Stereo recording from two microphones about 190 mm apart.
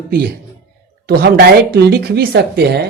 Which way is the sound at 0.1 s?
55° right (ahead or behind).